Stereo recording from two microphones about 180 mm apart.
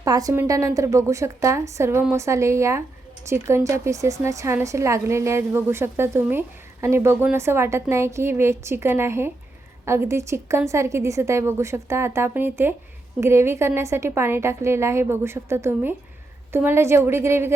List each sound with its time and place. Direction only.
0.0 s a woman's voice: 20° right (ahead or behind)